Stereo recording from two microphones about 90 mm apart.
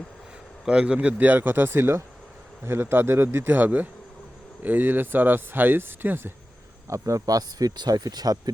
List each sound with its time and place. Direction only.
0.6 s speech: 10° right (ahead or behind)
6.8 s speech: 35° right (ahead or behind)